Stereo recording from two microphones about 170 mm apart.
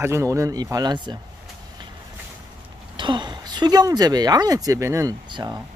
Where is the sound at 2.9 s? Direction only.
25° right (ahead or behind).